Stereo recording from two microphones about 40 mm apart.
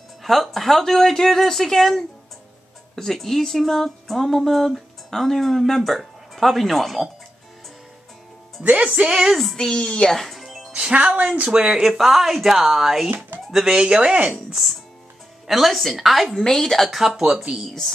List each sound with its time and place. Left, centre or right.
0.2 s speech: centre
8.8 s speech: right
9.1 s music: centre
9.6 s a woman's voice: centre
10.1 s music: centre
10.7 s music: right
11.4 s speech: right
11.8 s speech: centre; by 14.3 s right
14.5 s speech: centre
16.3 s speech: centre
16.9 s speech: centre